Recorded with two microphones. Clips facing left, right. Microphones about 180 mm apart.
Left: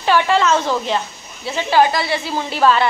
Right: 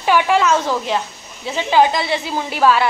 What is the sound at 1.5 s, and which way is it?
A woman's voice, 15° right (ahead or behind).